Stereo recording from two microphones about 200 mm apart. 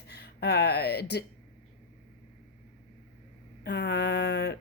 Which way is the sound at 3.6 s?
55° left (ahead or behind).